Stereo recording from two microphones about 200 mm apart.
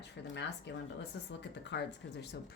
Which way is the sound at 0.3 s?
60° left (ahead or behind).